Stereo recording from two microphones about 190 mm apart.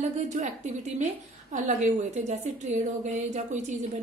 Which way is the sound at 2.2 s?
40° right (ahead or behind).